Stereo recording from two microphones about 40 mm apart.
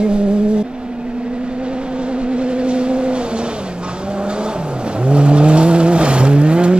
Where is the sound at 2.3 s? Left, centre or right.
Right.